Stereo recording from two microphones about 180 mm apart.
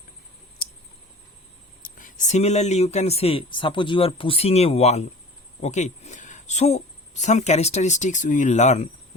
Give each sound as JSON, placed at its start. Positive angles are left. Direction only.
{"t": 0.6, "sound": "clicking", "side_deg": 55}
{"t": 1.8, "sound": "speech", "side_deg": 50}